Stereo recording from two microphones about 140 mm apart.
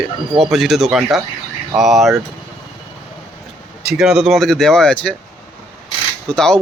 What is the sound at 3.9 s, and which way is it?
Speech, 5° right (ahead or behind).